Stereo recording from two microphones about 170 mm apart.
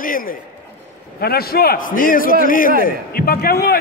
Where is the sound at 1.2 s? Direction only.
65° left (ahead or behind).